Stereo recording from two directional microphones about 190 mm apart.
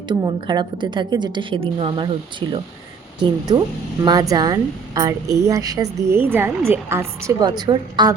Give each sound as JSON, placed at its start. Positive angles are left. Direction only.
{"t": 0.1, "sound": "a woman's voice", "side_deg": -25}